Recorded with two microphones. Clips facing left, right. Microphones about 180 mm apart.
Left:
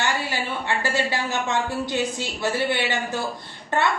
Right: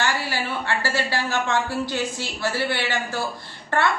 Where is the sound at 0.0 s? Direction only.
20° left (ahead or behind).